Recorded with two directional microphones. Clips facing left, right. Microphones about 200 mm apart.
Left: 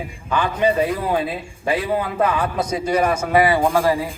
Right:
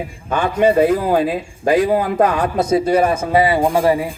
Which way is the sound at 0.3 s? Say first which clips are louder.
Right 4 dB; 45° right (ahead or behind).